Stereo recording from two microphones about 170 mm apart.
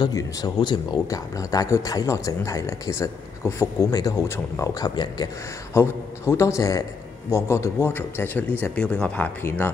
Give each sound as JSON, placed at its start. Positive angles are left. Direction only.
{"t": 0.0, "sound": "speech", "side_deg": 20}